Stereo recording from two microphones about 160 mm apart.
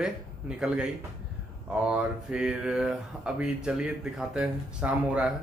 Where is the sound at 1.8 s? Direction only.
5° right (ahead or behind).